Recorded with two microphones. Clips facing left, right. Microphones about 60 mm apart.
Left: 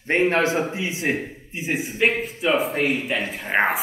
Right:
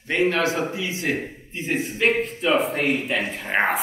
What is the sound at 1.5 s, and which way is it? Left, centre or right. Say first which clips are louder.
A man's voice: right 1 dB; centre.